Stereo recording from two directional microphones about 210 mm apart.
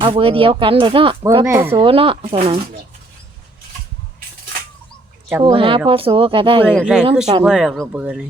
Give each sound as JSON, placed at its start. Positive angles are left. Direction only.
{"t": 0.0, "sound": "speech", "side_deg": -25}
{"t": 1.5, "sound": "speech", "side_deg": -15}
{"t": 1.8, "sound": "speech", "side_deg": -25}
{"t": 5.4, "sound": "speech", "side_deg": -25}
{"t": 6.7, "sound": "speech", "side_deg": -5}